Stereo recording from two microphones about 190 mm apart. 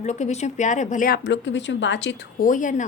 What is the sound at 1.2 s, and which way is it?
A woman's voice, 70° left (ahead or behind).